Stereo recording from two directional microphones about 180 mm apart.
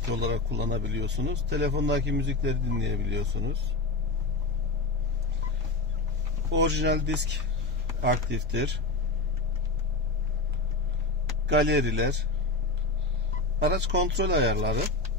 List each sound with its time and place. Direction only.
0.3 s speech: 70° right (ahead or behind)
6.5 s speech: 75° right (ahead or behind)
11.4 s speech: 70° right (ahead or behind)
13.6 s speech: 70° right (ahead or behind)